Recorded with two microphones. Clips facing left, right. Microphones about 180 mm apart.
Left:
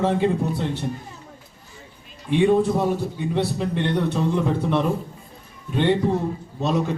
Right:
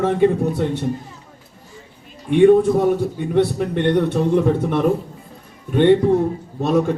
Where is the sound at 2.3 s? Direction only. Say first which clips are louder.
Right 6 dB; 55° right (ahead or behind).